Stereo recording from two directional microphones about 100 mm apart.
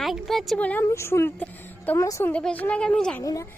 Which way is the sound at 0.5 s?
15° left (ahead or behind).